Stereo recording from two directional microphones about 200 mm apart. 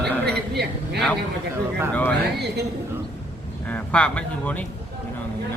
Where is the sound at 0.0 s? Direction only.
55° right (ahead or behind).